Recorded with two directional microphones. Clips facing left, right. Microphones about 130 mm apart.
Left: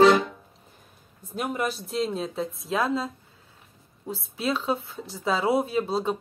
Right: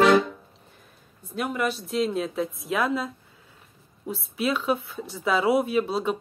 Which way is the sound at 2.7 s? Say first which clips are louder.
Even; 30° left (ahead or behind).